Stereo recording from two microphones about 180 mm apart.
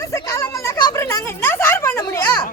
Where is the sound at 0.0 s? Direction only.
15° left (ahead or behind).